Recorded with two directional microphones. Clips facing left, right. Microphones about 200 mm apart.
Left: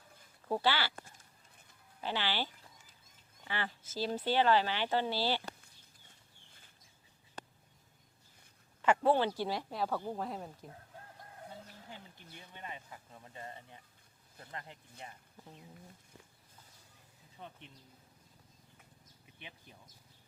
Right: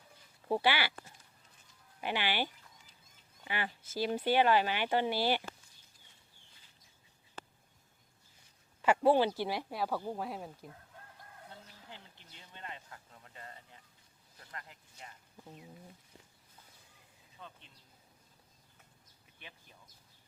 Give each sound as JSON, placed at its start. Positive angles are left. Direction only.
{"t": 0.4, "sound": "speech", "side_deg": -15}
{"t": 2.0, "sound": "speech", "side_deg": -15}
{"t": 8.8, "sound": "speech", "side_deg": -10}
{"t": 12.5, "sound": "speech", "side_deg": 15}
{"t": 17.4, "sound": "speech", "side_deg": 25}